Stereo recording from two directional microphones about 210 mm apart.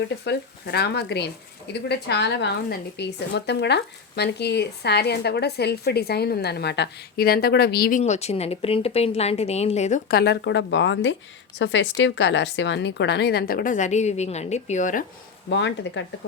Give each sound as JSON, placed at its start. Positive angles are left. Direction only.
{"t": 0.3, "sound": "speech", "side_deg": 50}
{"t": 10.1, "sound": "a woman's voice", "side_deg": 50}
{"t": 15.4, "sound": "a woman's voice", "side_deg": 60}